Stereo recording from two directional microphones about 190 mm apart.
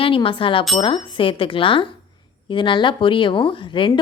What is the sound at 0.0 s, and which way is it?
A woman's voice, 25° left (ahead or behind).